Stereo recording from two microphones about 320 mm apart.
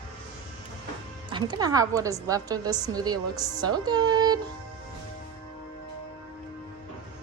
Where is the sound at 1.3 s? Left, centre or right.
Centre.